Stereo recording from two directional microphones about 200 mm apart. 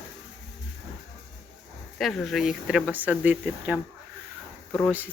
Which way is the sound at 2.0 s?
Centre (ahead or behind).